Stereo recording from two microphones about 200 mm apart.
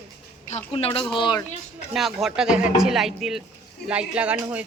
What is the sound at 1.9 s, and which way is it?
Speech, centre (ahead or behind).